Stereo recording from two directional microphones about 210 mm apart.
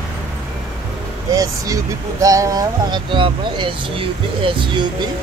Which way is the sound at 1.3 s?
15° right (ahead or behind).